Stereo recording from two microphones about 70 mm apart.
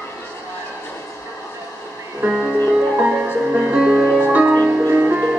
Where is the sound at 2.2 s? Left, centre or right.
Centre.